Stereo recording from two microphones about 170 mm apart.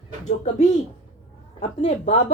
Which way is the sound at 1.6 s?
35° left (ahead or behind).